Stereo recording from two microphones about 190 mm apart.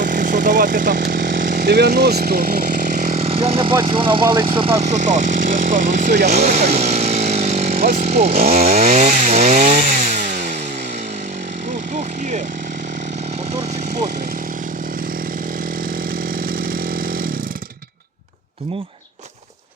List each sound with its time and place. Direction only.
0.0 s speech: 45° right (ahead or behind)
3.0 s speech: 35° right (ahead or behind)
6.7 s chainsaw: 35° right (ahead or behind)
8.0 s speech: 35° right (ahead or behind)